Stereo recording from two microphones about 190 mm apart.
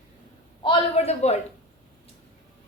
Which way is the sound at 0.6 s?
30° left (ahead or behind).